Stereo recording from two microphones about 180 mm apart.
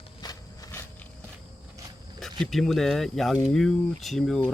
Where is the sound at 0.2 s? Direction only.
20° left (ahead or behind).